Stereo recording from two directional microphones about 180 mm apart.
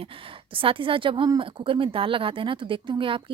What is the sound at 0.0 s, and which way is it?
A woman's voice, 30° right (ahead or behind).